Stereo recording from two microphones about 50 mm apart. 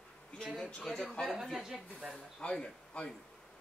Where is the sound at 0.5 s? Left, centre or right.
Centre.